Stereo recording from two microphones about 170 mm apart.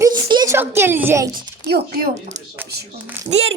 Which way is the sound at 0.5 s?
15° right (ahead or behind).